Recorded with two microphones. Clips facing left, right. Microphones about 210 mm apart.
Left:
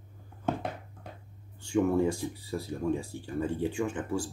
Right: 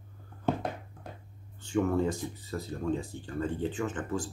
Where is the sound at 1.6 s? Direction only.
10° left (ahead or behind).